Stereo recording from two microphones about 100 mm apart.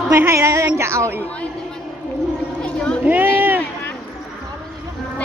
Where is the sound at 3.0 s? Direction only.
20° right (ahead or behind).